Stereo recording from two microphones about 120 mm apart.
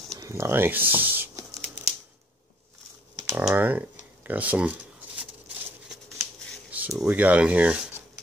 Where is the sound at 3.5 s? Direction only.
15° right (ahead or behind).